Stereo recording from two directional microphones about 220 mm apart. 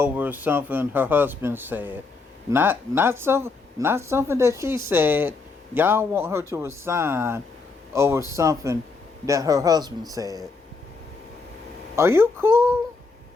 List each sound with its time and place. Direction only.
0.0 s speech: 10° right (ahead or behind)
11.9 s speech: 10° right (ahead or behind)